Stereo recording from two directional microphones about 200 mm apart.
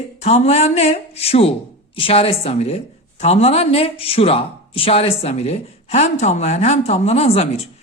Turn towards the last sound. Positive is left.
turn(degrees=30)  # may be behind; listen again after turning